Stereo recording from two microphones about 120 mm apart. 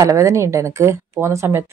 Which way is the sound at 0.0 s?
25° right (ahead or behind).